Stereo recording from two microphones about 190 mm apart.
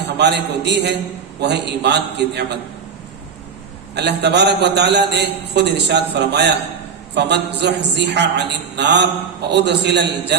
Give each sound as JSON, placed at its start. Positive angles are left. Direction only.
{"t": 0.2, "sound": "a man's voice", "side_deg": -65}
{"t": 3.9, "sound": "a man's voice", "side_deg": -60}